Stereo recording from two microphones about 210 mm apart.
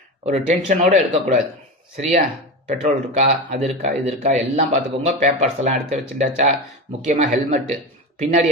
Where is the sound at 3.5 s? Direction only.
30° right (ahead or behind).